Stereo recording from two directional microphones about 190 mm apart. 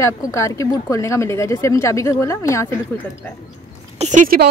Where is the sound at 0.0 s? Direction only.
15° left (ahead or behind).